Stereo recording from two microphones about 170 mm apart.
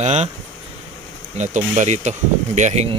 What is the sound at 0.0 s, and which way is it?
Speech, 40° right (ahead or behind).